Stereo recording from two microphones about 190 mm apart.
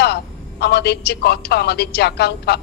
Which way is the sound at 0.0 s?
60° left (ahead or behind).